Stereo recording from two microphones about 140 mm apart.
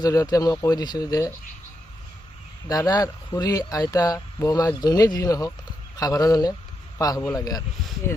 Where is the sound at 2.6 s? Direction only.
25° left (ahead or behind).